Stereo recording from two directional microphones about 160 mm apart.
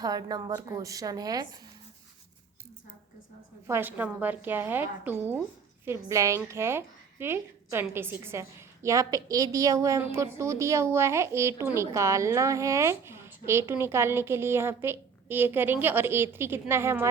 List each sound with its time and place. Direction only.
0.0 s a woman's voice: 25° right (ahead or behind)
3.7 s a woman's voice: 10° right (ahead or behind)